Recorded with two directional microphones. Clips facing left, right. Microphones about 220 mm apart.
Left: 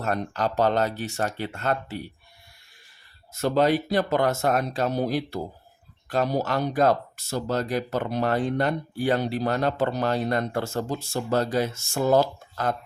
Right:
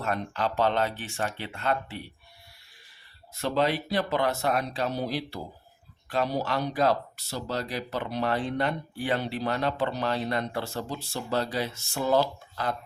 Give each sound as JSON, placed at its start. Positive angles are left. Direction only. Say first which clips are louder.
{"t": 0.0, "sound": "speech", "louder": "left 3 dB", "side_deg": 40}
{"t": 3.3, "sound": "speech", "louder": "left 5 dB", "side_deg": 45}